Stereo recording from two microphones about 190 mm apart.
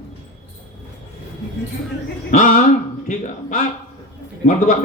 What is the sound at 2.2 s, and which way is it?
Speech, 45° left (ahead or behind).